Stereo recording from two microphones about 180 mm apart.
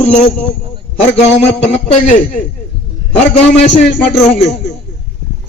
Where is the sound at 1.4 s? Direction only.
40° left (ahead or behind).